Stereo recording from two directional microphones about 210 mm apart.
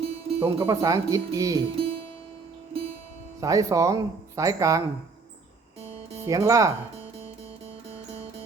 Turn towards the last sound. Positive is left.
turn(degrees=-15)  # may be behind; listen again after turning